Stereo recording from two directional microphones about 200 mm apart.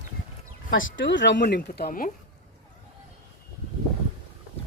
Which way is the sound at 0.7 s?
75° left (ahead or behind).